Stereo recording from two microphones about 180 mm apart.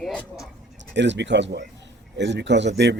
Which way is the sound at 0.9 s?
75° right (ahead or behind).